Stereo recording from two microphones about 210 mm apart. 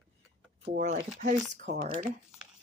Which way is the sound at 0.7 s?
45° right (ahead or behind).